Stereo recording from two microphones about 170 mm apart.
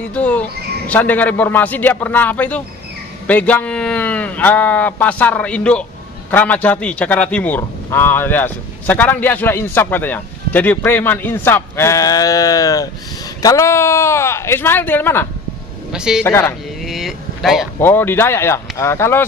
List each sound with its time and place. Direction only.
0.1 s a man's voice: 10° left (ahead or behind)
15.9 s speech: 5° right (ahead or behind)
16.3 s a man's voice: 15° left (ahead or behind)
16.8 s vehicle: centre (ahead or behind)
17.7 s a man's voice: 15° left (ahead or behind)